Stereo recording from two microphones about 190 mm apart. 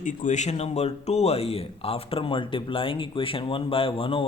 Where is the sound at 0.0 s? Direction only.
40° left (ahead or behind).